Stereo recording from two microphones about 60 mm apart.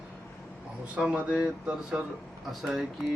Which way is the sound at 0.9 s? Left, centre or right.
Centre.